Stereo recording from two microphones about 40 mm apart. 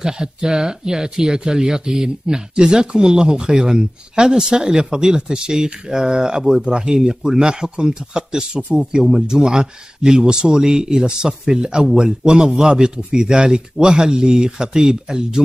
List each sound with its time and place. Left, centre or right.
0.0 s speech: centre